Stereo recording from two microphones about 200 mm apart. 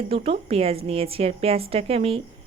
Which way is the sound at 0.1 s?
30° right (ahead or behind).